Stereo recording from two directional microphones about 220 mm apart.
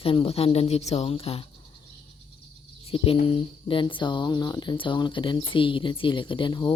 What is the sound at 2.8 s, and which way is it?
Speech, 25° left (ahead or behind).